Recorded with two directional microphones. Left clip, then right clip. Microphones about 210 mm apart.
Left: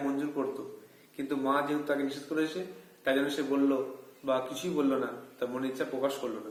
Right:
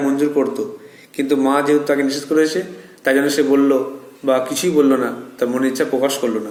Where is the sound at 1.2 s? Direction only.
40° right (ahead or behind).